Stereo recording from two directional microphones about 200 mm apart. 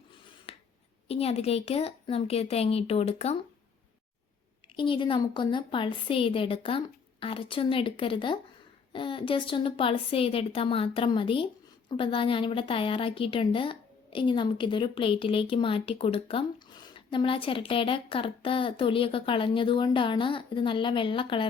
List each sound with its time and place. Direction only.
0.5 s finger snapping: 30° left (ahead or behind)
1.0 s a woman's voice: 30° left (ahead or behind)
4.8 s a woman's voice: 25° left (ahead or behind)